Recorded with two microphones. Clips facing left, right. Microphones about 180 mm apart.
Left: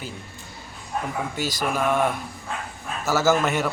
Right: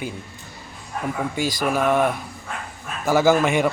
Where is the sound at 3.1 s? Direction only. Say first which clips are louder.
Right 4 dB; 15° right (ahead or behind).